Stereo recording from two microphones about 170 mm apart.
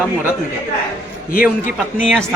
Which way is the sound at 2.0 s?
5° left (ahead or behind).